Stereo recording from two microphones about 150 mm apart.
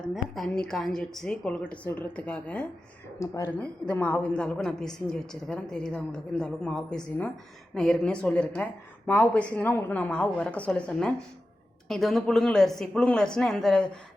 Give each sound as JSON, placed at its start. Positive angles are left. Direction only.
{"t": 0.1, "sound": "a woman's voice", "side_deg": 5}
{"t": 3.2, "sound": "speech", "side_deg": 20}
{"t": 3.6, "sound": "a woman's voice", "side_deg": 10}